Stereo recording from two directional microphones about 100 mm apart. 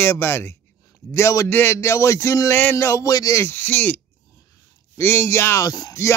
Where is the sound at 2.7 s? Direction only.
30° left (ahead or behind).